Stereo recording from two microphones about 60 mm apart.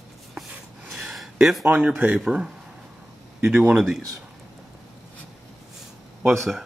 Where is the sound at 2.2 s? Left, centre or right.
Centre.